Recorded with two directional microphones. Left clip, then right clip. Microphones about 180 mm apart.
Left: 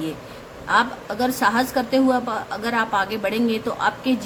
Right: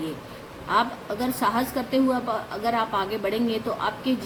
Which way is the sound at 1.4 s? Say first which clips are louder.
Left 4 dB; 70° left (ahead or behind).